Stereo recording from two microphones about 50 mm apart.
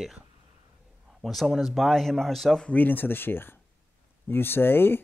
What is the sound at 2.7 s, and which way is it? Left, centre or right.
Speech, left.